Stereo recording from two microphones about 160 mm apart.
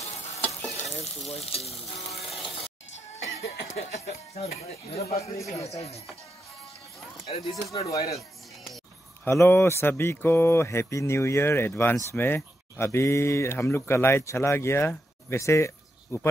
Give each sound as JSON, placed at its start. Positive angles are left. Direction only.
{"t": 0.0, "sound": "stir", "side_deg": 40}
{"t": 0.7, "sound": "frying", "side_deg": 45}
{"t": 3.7, "sound": "frying", "side_deg": 40}
{"t": 5.6, "sound": "speech", "side_deg": 20}
{"t": 7.2, "sound": "frying", "side_deg": 40}
{"t": 9.2, "sound": "speech", "side_deg": 15}